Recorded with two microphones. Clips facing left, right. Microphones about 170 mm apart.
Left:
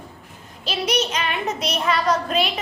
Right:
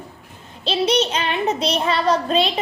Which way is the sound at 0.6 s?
30° right (ahead or behind).